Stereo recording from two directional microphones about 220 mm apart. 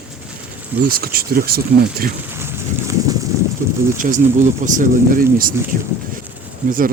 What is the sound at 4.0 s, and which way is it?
Speech, 35° right (ahead or behind).